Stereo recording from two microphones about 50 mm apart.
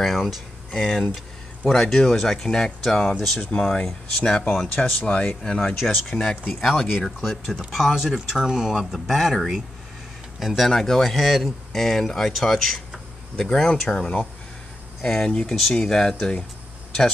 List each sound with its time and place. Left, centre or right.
0.0 s a sound: centre
0.7 s speech: centre
4.5 s speech: centre
4.8 s speech: left
6.6 s speech: centre
9.1 s speech: centre
13.4 s speech: centre